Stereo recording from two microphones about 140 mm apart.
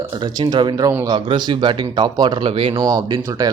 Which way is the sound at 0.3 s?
30° right (ahead or behind).